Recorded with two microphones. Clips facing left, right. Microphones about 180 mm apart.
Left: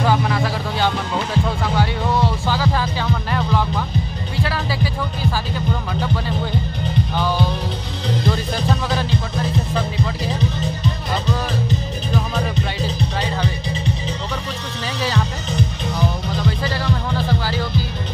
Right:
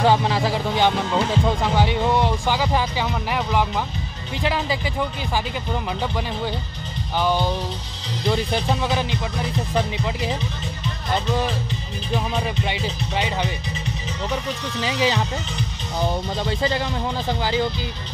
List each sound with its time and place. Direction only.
0.0 s music: 25° right (ahead or behind)
7.2 s music: 15° right (ahead or behind)
16.6 s music: 15° right (ahead or behind)